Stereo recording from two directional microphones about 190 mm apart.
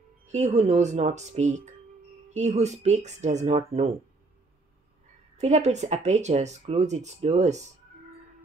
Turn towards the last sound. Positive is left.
turn(degrees=-35)  # may be behind; listen again after turning